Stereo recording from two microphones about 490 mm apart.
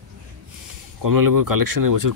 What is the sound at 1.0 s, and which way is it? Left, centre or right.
Speech, right.